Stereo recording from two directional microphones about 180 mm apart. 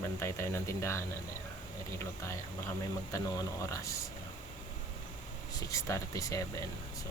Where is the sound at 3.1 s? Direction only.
15° left (ahead or behind).